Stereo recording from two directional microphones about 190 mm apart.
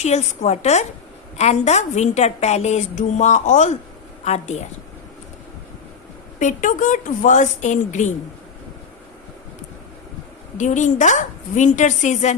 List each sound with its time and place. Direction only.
0.0 s a woman's voice: 35° left (ahead or behind)
6.4 s a woman's voice: 45° left (ahead or behind)
10.6 s a woman's voice: 40° left (ahead or behind)